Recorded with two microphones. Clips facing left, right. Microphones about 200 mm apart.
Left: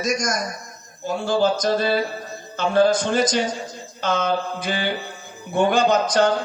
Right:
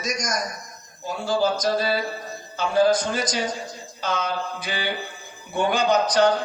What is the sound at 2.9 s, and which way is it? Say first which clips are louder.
A man's voice: left 3 dB; 50° left (ahead or behind).